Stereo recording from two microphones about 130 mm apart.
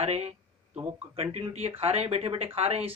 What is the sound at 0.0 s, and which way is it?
Speech, 55° right (ahead or behind).